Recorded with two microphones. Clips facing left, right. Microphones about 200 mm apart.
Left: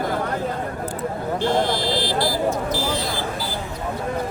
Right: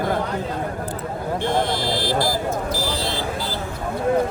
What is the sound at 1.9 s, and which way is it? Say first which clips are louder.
Vehicle: even; 50° right (ahead or behind).